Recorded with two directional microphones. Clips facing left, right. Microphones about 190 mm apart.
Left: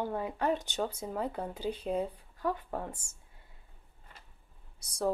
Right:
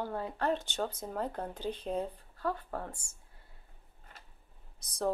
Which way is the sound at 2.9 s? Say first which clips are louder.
Left 3 dB; 40° left (ahead or behind).